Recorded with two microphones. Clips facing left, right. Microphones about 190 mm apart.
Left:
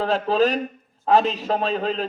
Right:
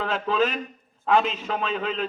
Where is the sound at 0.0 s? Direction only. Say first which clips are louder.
Left 4 dB; 35° left (ahead or behind).